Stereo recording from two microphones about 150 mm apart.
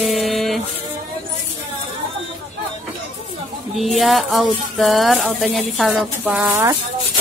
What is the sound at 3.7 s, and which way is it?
Speech, centre (ahead or behind).